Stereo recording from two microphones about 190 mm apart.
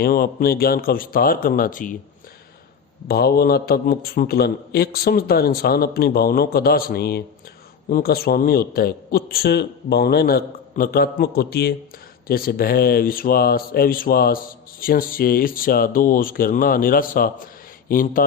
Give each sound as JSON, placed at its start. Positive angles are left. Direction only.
{"t": 0.0, "sound": "speech", "side_deg": 50}
{"t": 3.1, "sound": "speech", "side_deg": 55}